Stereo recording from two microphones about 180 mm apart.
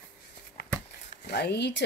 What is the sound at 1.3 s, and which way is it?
Speech, 65° left (ahead or behind).